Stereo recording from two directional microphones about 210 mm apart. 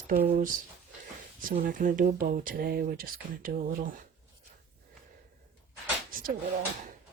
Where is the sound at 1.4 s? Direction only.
40° right (ahead or behind).